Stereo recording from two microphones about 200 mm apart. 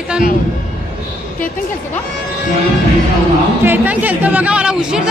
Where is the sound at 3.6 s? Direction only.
10° right (ahead or behind).